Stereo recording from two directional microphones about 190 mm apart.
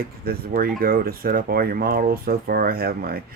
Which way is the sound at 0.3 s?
50° right (ahead or behind).